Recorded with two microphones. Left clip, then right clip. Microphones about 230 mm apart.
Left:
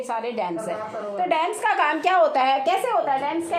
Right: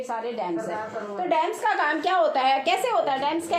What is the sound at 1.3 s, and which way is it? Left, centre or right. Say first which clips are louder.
A woman's voice: left 1 dB; left.